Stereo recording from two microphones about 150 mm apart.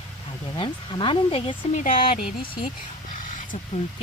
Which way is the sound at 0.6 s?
35° left (ahead or behind).